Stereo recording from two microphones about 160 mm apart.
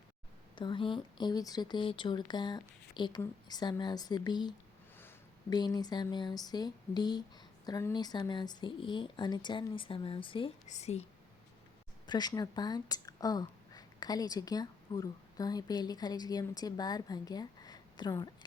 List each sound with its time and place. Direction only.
0.5 s speech: 30° left (ahead or behind)
10.7 s a woman's voice: 45° left (ahead or behind)
12.0 s speech: 25° left (ahead or behind)